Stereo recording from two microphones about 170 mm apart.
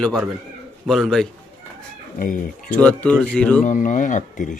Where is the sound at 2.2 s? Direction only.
50° left (ahead or behind).